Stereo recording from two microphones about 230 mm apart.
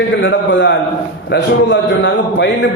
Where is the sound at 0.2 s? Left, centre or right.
Left.